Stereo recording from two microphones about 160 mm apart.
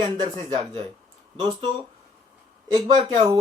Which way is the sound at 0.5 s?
40° right (ahead or behind).